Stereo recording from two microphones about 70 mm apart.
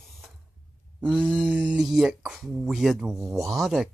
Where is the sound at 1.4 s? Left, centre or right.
Centre.